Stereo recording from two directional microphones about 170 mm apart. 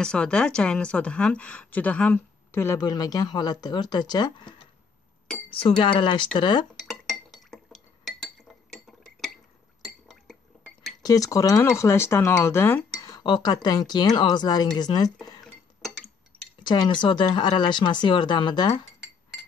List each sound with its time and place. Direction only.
0.0 s a woman's voice: 5° left (ahead or behind); by 6.7 s 25° left (ahead or behind)
6.8 s chink: centre (ahead or behind)
8.7 s chink: centre (ahead or behind)
11.0 s speech: 20° left (ahead or behind)
15.4 s dishes: centre (ahead or behind)
16.6 s speech: 25° left (ahead or behind)